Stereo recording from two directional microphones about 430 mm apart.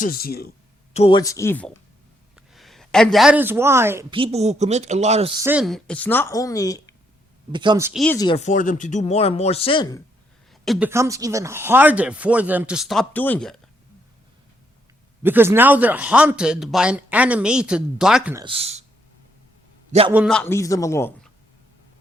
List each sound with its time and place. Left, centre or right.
0.0 s speech: left
7.5 s speech: centre
10.5 s speech: centre
15.2 s speech: centre
19.9 s a man's voice: centre
20.1 s speech: centre